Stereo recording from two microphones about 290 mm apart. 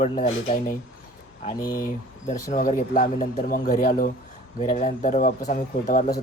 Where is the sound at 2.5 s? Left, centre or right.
Left.